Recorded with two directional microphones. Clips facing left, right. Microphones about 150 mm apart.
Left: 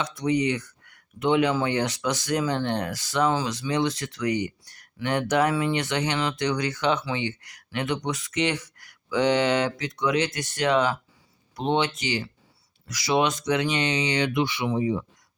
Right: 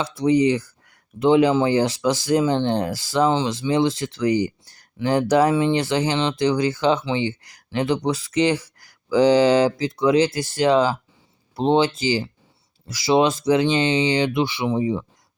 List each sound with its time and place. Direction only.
0.0 s speech: 30° right (ahead or behind)